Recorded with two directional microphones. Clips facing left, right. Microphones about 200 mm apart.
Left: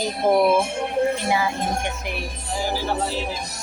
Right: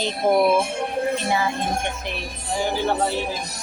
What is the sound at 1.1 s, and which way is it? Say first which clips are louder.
Music: even; 10° left (ahead or behind).